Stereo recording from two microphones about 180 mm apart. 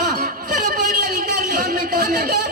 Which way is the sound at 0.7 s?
60° right (ahead or behind).